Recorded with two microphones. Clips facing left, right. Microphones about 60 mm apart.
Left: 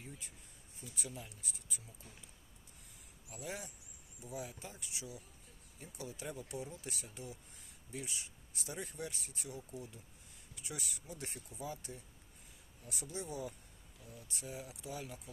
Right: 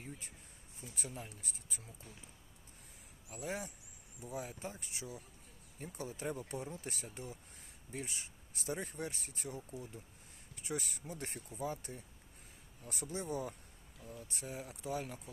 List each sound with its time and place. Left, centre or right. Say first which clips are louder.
0.8 s speech: right 1 dB; right
3.2 s speech: right 4 dB; right